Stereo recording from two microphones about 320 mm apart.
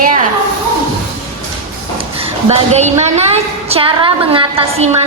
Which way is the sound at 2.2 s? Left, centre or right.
Centre.